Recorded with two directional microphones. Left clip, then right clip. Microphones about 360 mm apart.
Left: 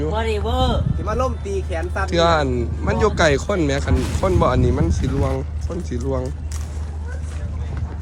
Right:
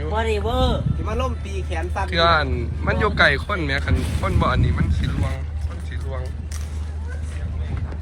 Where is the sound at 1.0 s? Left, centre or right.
Right.